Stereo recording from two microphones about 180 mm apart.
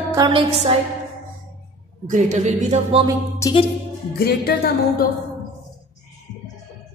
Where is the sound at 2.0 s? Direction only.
45° right (ahead or behind).